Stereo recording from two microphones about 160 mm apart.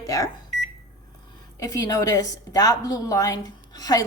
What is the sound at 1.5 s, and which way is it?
A woman's voice, 20° left (ahead or behind).